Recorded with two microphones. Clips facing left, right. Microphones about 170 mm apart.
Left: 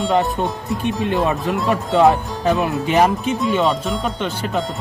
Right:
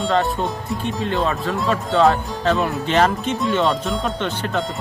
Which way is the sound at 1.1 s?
20° left (ahead or behind).